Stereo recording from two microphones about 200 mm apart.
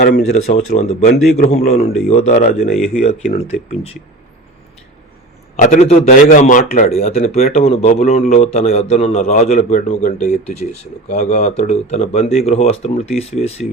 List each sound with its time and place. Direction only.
0.2 s a man's voice: 35° left (ahead or behind)
5.5 s a man's voice: 35° left (ahead or behind)